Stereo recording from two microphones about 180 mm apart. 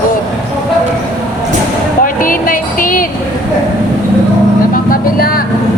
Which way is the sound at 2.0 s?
50° left (ahead or behind).